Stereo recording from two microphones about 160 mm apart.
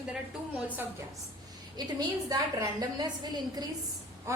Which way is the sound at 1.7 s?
25° right (ahead or behind).